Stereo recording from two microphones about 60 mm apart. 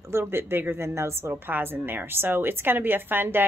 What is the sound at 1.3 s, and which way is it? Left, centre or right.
A woman's voice, right.